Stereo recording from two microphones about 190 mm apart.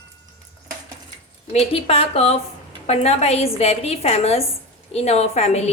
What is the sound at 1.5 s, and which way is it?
A woman's voice, 30° left (ahead or behind).